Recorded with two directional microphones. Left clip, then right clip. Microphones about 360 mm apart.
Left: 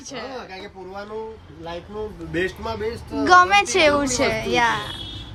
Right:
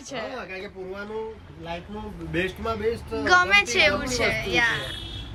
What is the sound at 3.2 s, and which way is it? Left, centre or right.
A woman's voice, centre.